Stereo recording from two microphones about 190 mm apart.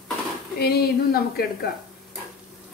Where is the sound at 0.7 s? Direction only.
55° left (ahead or behind).